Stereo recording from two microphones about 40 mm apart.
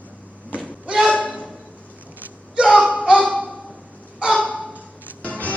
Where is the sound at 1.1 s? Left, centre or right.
Left.